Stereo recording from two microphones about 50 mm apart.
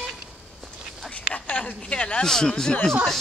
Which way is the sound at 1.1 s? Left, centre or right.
Left.